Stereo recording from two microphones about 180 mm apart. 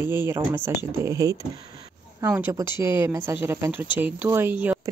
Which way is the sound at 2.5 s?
15° right (ahead or behind).